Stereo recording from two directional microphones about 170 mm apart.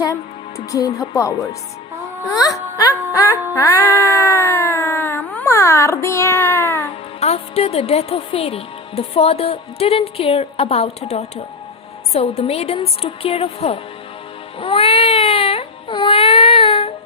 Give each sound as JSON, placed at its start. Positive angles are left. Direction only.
{"t": 0.7, "sound": "speech", "side_deg": 20}
{"t": 2.4, "sound": "music", "side_deg": 20}
{"t": 3.6, "sound": "cat", "side_deg": 15}
{"t": 7.2, "sound": "speech", "side_deg": 35}
{"t": 14.6, "sound": "baby cry", "side_deg": 30}